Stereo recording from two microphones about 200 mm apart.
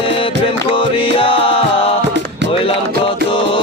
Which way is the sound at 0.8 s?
25° left (ahead or behind).